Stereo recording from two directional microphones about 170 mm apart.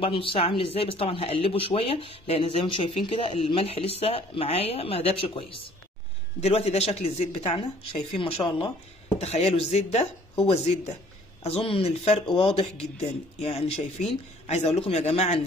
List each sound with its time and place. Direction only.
0.0 s speech: 30° left (ahead or behind)